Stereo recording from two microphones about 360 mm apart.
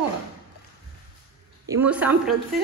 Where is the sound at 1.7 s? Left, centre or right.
Centre.